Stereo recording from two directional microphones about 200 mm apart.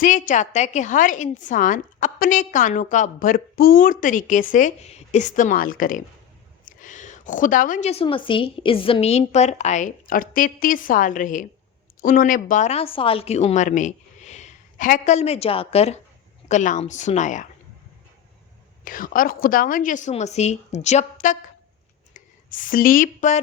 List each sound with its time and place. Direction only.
0.0 s a woman's voice: 40° left (ahead or behind)
18.9 s a woman's voice: 45° left (ahead or behind)